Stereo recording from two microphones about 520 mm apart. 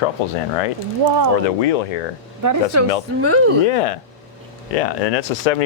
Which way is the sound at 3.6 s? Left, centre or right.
Left.